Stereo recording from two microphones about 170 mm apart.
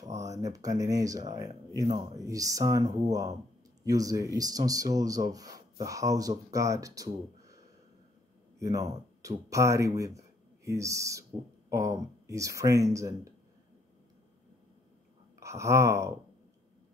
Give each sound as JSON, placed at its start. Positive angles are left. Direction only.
{"t": 0.0, "sound": "speech", "side_deg": -20}
{"t": 15.3, "sound": "wail", "side_deg": -15}